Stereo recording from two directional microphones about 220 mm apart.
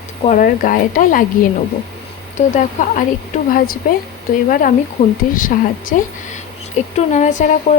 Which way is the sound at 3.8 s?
40° left (ahead or behind).